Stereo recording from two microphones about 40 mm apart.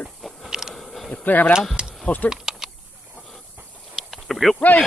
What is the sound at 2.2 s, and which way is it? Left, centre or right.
Typing, centre.